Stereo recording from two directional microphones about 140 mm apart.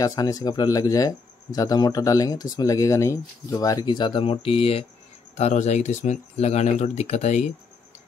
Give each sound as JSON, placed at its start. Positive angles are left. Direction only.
{"t": 0.0, "sound": "speech", "side_deg": 25}
{"t": 5.3, "sound": "speech", "side_deg": 55}